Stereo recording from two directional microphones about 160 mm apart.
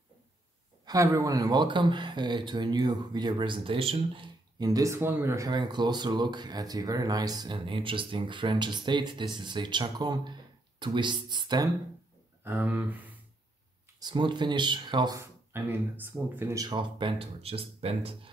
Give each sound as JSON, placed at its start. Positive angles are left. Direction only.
{"t": 0.8, "sound": "speech", "side_deg": -20}
{"t": 12.4, "sound": "speech", "side_deg": -10}
{"t": 13.9, "sound": "speech", "side_deg": -25}